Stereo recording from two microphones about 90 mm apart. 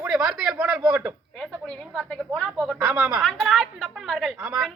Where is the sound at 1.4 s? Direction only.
5° left (ahead or behind).